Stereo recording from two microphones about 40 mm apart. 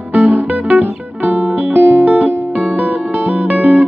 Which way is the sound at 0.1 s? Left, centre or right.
Right.